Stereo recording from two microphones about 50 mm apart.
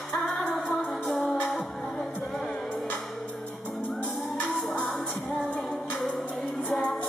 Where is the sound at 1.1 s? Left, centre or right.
Centre.